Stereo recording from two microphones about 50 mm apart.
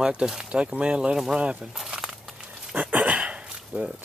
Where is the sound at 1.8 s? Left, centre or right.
Centre.